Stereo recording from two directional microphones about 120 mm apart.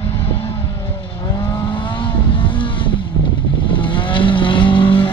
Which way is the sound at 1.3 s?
35° left (ahead or behind).